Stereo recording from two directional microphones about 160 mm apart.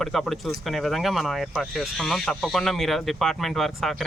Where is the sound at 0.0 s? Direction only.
Centre (ahead or behind).